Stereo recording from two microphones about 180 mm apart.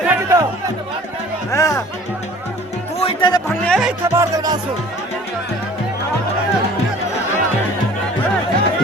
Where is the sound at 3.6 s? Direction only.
Centre (ahead or behind).